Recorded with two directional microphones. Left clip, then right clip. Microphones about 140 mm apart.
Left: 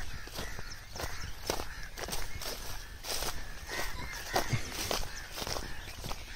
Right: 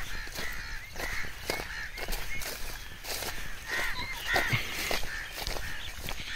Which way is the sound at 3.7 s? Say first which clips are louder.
Right 6 dB; 25° left (ahead or behind).